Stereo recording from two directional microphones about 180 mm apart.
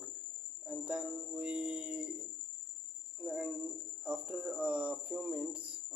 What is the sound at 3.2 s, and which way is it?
Speech, 5° right (ahead or behind).